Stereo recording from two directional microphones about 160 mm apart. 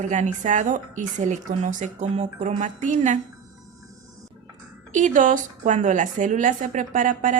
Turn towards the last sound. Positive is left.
turn(degrees=-55)  # may be behind; listen again after turning